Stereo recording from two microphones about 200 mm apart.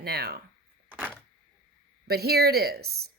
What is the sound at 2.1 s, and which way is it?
Speech, 50° right (ahead or behind).